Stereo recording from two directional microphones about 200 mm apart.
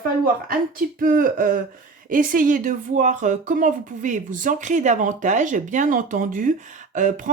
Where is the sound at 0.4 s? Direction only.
45° right (ahead or behind).